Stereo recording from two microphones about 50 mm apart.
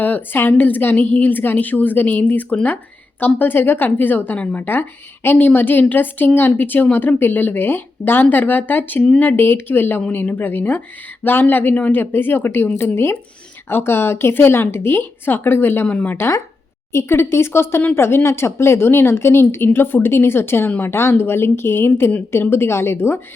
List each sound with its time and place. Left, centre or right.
0.0 s a woman's voice: left
15.9 s speech: left
16.9 s a woman's voice: left